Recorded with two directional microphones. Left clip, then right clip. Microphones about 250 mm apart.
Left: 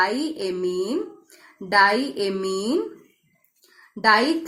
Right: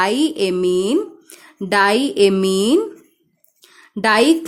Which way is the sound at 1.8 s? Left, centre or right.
Right.